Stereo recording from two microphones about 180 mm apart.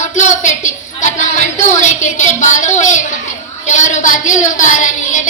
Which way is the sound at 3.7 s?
40° left (ahead or behind).